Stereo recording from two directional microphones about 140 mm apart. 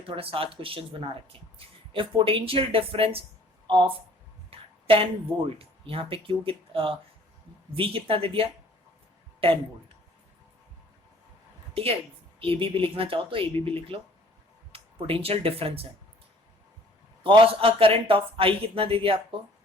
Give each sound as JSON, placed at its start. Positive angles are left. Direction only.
{"t": 0.1, "sound": "speech", "side_deg": -40}
{"t": 4.5, "sound": "a sound", "side_deg": -40}
{"t": 5.5, "sound": "speech", "side_deg": -40}
{"t": 11.7, "sound": "a woman's voice", "side_deg": -45}
{"t": 17.2, "sound": "speech", "side_deg": -40}